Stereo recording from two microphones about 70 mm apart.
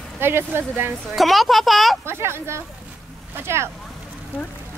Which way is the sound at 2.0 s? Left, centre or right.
Right.